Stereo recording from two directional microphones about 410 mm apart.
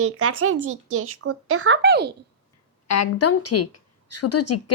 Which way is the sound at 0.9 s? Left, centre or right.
Right.